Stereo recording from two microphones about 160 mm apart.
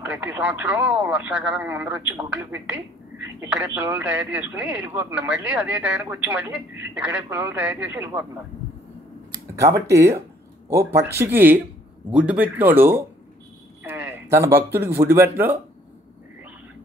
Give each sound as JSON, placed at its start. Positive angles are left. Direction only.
{"t": 0.0, "sound": "speech", "side_deg": -10}
{"t": 9.6, "sound": "speech", "side_deg": -20}